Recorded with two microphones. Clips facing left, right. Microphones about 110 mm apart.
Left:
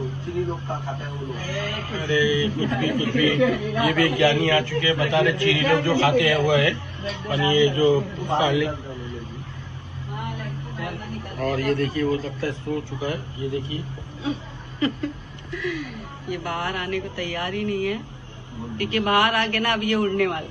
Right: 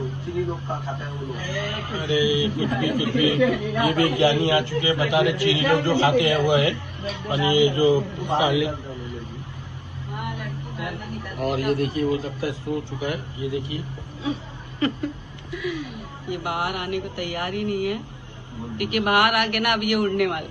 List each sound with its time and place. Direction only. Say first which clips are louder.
0.7 s speech: even; 20° right (ahead or behind)
10.4 s a sound: even; 35° left (ahead or behind)
11.3 s speech: even; 20° right (ahead or behind)
13.0 s speech: even; 35° left (ahead or behind)
13.6 s speech: even; 20° right (ahead or behind)
19.1 s speech: right 1 dB; 30° left (ahead or behind)